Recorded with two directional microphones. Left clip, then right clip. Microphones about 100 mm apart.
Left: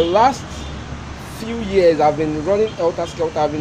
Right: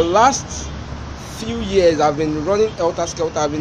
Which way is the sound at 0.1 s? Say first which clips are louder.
Right 2 dB; 10° right (ahead or behind).